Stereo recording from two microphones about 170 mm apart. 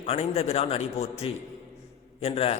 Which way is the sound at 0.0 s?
40° left (ahead or behind).